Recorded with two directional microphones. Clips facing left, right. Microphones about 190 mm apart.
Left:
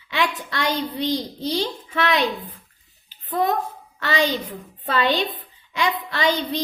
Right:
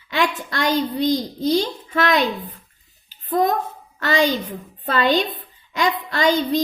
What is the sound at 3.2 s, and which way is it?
A child's voice, 45° right (ahead or behind).